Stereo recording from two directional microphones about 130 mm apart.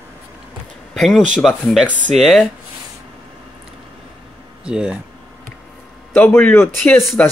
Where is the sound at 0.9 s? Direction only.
5° left (ahead or behind).